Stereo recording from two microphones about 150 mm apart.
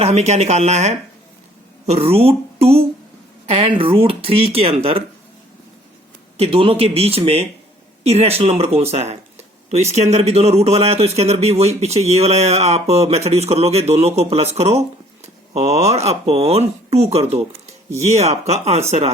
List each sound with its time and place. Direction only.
0.0 s speech: 45° right (ahead or behind)
6.3 s speech: 40° right (ahead or behind)